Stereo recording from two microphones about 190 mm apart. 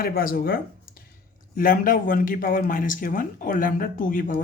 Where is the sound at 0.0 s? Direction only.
50° left (ahead or behind).